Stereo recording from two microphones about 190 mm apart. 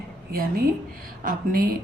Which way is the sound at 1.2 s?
45° right (ahead or behind).